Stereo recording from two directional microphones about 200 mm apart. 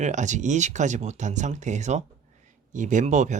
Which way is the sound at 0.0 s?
35° right (ahead or behind).